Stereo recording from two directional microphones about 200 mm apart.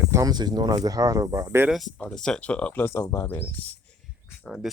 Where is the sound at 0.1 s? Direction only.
20° right (ahead or behind).